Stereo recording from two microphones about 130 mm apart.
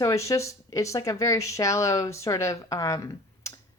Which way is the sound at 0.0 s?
25° left (ahead or behind).